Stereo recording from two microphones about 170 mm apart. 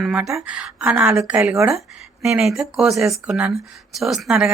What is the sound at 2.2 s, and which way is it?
Speech, centre (ahead or behind).